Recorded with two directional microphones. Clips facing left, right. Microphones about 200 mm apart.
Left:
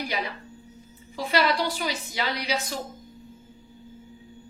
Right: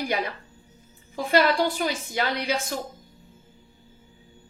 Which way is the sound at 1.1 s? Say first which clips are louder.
Right 3 dB; 50° right (ahead or behind).